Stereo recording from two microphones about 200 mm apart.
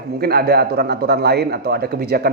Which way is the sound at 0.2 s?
50° right (ahead or behind).